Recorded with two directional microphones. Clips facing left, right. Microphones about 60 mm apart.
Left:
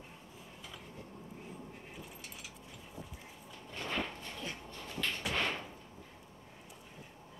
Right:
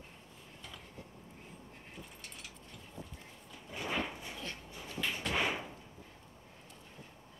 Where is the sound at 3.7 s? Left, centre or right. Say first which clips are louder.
Right 1 dB; centre.